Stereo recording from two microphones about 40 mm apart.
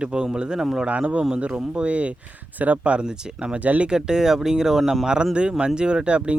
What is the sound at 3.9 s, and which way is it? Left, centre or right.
Speech, centre.